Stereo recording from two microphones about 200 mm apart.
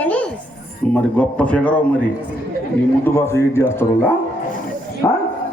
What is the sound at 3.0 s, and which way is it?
A man's voice, 10° left (ahead or behind).